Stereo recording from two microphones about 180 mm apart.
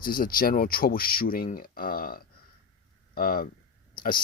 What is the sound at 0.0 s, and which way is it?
Speech, 55° left (ahead or behind).